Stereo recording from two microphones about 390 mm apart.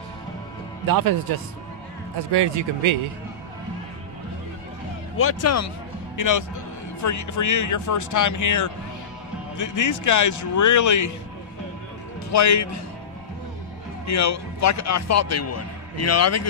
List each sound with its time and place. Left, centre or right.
0.8 s speech: right
2.3 s speech: right
5.1 s speech: left
6.1 s a man's voice: left
12.3 s a man's voice: left
14.0 s a man's voice: left